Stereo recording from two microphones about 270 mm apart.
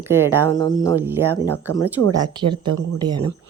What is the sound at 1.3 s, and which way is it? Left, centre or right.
Speech, right.